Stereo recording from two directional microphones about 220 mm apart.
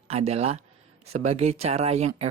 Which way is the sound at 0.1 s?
30° right (ahead or behind).